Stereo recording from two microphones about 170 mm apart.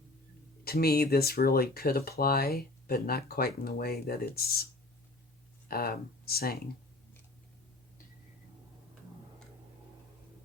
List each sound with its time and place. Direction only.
0.6 s speech: 65° left (ahead or behind)